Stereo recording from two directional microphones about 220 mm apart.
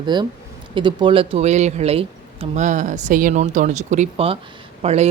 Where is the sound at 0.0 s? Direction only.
20° right (ahead or behind).